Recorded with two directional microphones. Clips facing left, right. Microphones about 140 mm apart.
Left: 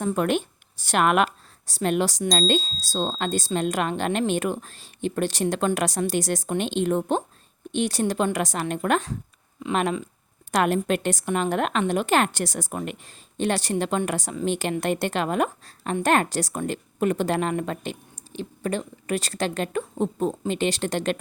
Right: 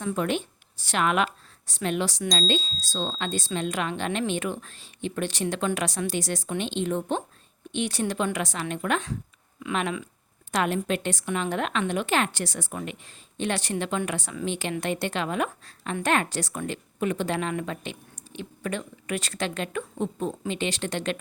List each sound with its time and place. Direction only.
0.0 s speech: 50° left (ahead or behind)
1.6 s a woman's voice: 40° left (ahead or behind)